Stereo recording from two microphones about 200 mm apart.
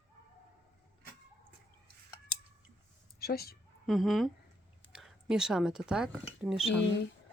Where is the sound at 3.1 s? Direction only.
50° left (ahead or behind).